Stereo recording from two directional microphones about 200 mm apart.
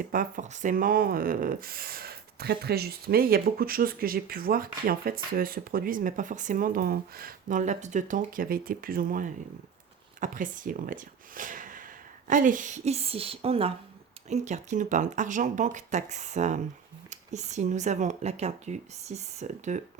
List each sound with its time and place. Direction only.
0.0 s speech: 45° right (ahead or behind)